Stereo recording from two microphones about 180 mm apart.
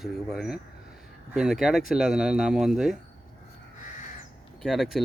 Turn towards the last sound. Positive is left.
turn(degrees=0)  # may be behind; listen again after turning